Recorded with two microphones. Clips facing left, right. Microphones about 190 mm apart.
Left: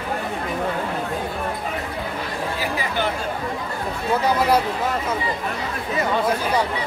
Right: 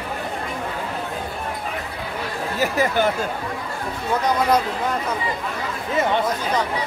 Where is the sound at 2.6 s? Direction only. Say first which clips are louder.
Right 8 dB; 45° right (ahead or behind).